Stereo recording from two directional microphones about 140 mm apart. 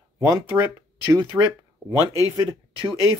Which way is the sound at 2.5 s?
40° right (ahead or behind).